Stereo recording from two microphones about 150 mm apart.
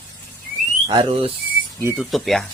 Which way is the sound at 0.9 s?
35° right (ahead or behind).